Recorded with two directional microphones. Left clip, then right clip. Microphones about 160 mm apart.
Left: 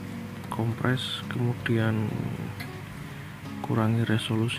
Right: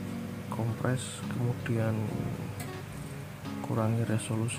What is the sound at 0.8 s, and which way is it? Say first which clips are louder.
Speech: left 7 dB; 10° left (ahead or behind).